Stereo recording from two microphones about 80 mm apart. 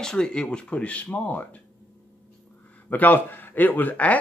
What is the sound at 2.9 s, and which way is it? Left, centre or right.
Speech, left.